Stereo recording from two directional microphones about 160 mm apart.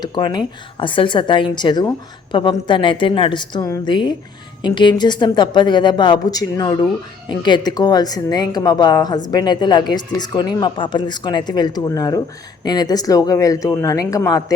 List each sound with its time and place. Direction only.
0.0 s speech: 30° left (ahead or behind)